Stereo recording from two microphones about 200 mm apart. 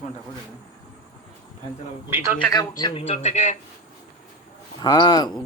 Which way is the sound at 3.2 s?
35° left (ahead or behind).